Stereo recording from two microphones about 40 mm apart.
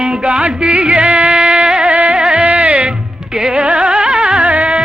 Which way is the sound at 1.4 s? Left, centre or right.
Right.